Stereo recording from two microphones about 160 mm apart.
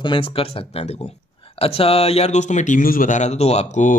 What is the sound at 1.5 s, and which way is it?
Speech, 35° left (ahead or behind).